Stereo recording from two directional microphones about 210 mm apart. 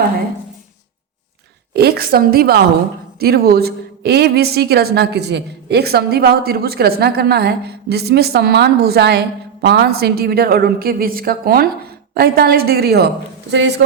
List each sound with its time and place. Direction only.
1.7 s a woman's voice: 50° right (ahead or behind)